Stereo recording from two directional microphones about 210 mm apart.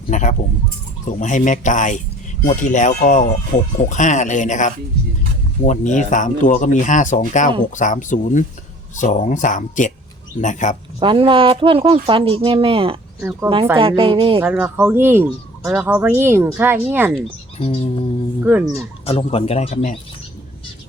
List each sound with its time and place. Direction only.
0.1 s speech: 35° left (ahead or behind)
11.0 s speech: 25° right (ahead or behind)
14.4 s speech: 5° right (ahead or behind)
17.6 s speech: 30° left (ahead or behind)
18.4 s speech: 10° right (ahead or behind)
19.0 s speech: 30° left (ahead or behind)